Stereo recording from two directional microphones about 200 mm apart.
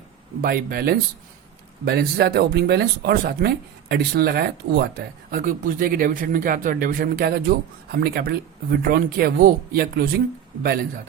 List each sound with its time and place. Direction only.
0.4 s speech: 50° right (ahead or behind)